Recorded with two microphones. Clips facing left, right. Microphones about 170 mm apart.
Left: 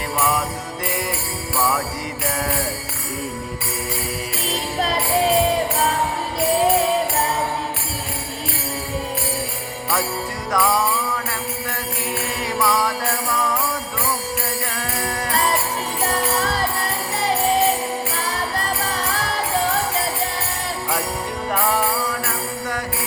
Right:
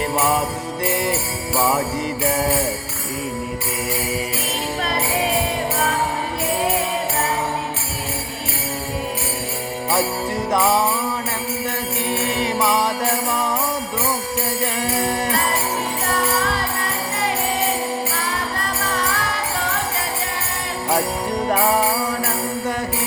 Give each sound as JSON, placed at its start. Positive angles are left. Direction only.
{"t": 0.2, "sound": "music", "side_deg": -30}
{"t": 1.5, "sound": "music", "side_deg": -25}
{"t": 10.5, "sound": "music", "side_deg": -25}
{"t": 12.4, "sound": "music", "side_deg": -20}